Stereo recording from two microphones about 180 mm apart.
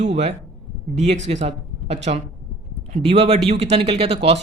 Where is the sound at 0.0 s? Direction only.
35° right (ahead or behind).